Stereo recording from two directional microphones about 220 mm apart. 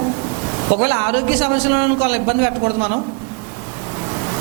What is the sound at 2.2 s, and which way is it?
Speech, 25° right (ahead or behind).